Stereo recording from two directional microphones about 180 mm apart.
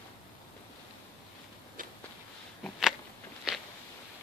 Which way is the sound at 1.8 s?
50° right (ahead or behind).